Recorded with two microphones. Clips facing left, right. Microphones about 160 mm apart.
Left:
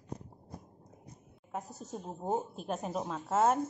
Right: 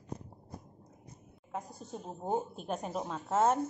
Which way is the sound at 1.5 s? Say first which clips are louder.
Left 1 dB; 5° left (ahead or behind).